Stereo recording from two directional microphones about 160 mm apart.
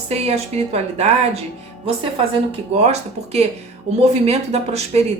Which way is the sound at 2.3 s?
40° right (ahead or behind).